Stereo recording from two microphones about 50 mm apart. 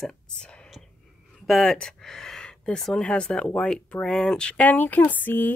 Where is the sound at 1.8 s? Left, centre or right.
Centre.